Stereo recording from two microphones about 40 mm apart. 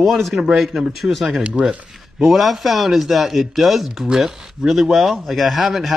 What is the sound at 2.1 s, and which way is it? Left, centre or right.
A man's voice, centre.